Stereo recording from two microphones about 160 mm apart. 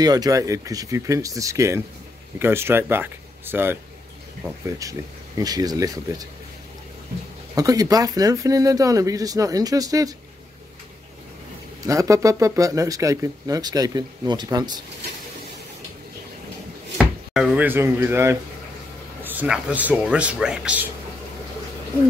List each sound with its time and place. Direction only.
0.0 s speech: 25° right (ahead or behind)
7.5 s speech: 20° right (ahead or behind)
11.8 s speech: 20° right (ahead or behind)
17.0 s speech: 5° right (ahead or behind)